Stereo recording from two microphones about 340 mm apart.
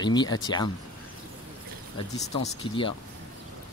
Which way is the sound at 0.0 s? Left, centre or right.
Centre.